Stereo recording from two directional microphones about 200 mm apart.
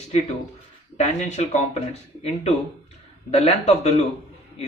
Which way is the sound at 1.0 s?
35° left (ahead or behind).